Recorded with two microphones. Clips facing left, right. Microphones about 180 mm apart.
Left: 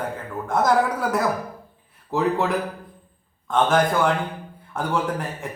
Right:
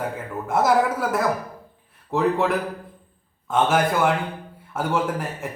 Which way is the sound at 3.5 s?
5° right (ahead or behind).